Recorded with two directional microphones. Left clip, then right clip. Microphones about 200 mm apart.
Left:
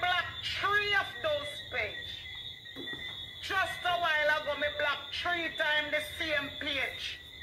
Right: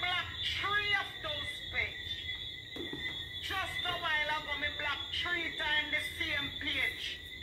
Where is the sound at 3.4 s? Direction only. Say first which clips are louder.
Left 5 dB; 45° left (ahead or behind).